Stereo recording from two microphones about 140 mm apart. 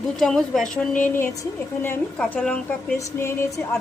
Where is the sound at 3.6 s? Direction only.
10° left (ahead or behind).